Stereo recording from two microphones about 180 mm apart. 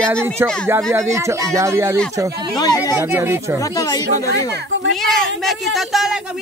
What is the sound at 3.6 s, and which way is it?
Speech, 20° left (ahead or behind).